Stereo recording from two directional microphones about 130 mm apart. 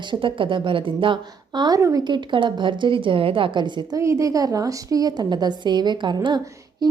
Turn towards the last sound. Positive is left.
turn(degrees=-30)  # may be behind; listen again after turning